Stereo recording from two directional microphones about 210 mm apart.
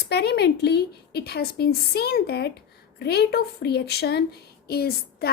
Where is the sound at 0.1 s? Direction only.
50° left (ahead or behind).